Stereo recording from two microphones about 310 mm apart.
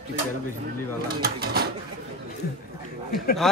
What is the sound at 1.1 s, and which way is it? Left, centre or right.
Speech, right.